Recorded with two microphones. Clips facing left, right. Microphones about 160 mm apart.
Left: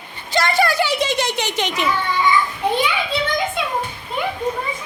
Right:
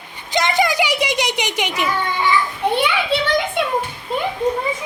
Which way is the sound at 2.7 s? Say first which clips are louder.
Right 4 dB; 65° right (ahead or behind).